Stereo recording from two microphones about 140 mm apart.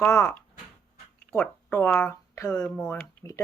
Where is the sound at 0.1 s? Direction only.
20° left (ahead or behind).